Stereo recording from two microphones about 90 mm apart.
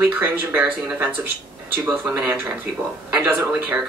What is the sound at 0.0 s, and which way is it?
Speech, 25° right (ahead or behind).